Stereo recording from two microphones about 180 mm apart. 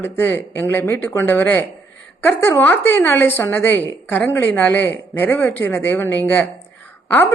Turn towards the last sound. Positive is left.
turn(degrees=10)  # may be behind; listen again after turning